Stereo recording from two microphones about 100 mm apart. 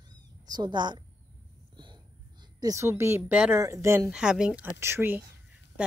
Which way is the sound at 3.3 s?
15° right (ahead or behind).